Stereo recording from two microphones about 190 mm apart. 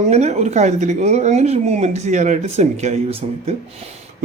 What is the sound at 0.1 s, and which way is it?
Speech, 35° right (ahead or behind).